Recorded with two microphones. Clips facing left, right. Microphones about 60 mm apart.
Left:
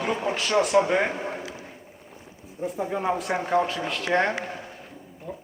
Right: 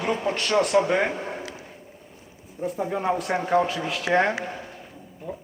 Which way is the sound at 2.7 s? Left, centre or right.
Centre.